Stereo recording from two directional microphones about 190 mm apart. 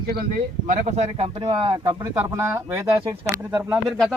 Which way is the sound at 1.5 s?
25° right (ahead or behind).